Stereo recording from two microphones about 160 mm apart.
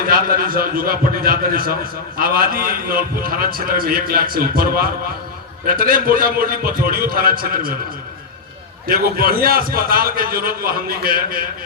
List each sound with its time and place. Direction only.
0.1 s a man's voice: 65° right (ahead or behind)
8.9 s a man's voice: 65° right (ahead or behind)